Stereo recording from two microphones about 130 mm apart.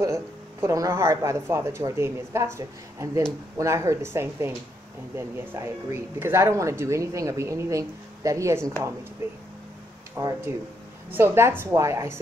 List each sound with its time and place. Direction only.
0.0 s speech: 20° right (ahead or behind)
10.2 s speech: 25° right (ahead or behind)